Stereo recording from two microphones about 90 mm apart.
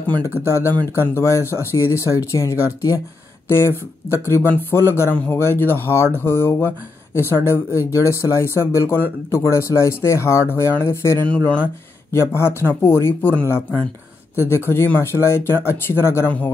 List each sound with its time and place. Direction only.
0.5 s speech: 30° left (ahead or behind)
3.4 s speech: 30° left (ahead or behind)
11.2 s speech: 15° left (ahead or behind)
12.1 s speech: 30° left (ahead or behind)